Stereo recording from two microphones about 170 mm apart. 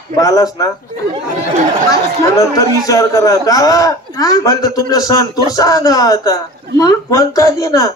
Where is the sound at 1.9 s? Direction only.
20° left (ahead or behind).